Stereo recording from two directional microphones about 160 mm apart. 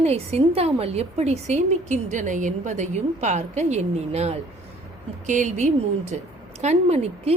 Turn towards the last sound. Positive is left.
turn(degrees=-45)  # may be behind; listen again after turning